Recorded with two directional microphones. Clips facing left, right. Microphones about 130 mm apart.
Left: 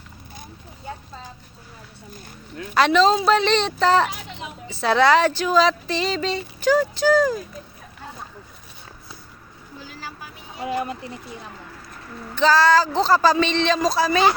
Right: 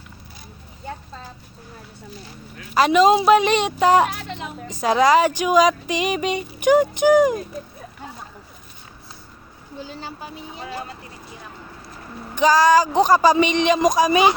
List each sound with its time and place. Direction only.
2.7 s speech: 10° right (ahead or behind)
9.8 s vehicle: 25° right (ahead or behind)
10.6 s speech: 20° left (ahead or behind)
12.3 s speech: 15° right (ahead or behind)